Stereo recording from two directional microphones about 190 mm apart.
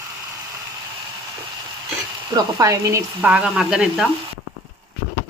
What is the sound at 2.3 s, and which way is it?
Speech, 20° right (ahead or behind).